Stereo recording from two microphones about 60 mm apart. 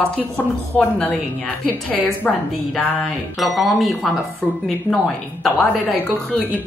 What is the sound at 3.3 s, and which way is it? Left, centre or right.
Speech, centre.